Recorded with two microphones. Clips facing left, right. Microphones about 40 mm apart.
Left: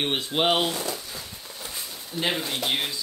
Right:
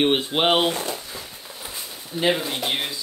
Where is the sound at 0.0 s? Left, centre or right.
Right.